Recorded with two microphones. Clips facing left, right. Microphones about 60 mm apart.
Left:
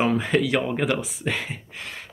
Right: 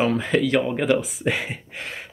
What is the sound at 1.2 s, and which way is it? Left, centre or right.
Speech, centre.